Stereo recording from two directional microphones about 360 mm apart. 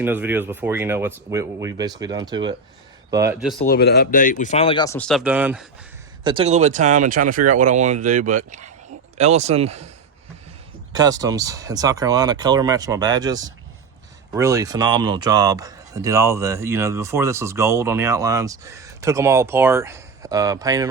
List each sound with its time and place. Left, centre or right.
0.0 s a man's voice: centre
3.6 s speech: left; by 5.6 s centre
6.2 s a man's voice: centre
10.9 s a man's voice: centre